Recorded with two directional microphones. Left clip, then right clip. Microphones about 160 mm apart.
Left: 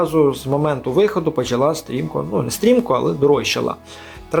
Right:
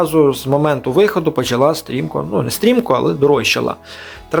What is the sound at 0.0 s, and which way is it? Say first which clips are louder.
Speech: right 3 dB; 15° right (ahead or behind).